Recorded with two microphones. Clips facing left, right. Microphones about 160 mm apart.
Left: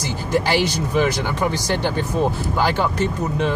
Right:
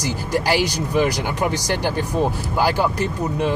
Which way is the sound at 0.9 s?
15° right (ahead or behind).